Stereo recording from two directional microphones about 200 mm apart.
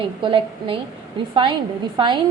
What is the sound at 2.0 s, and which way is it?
Speech, 25° right (ahead or behind).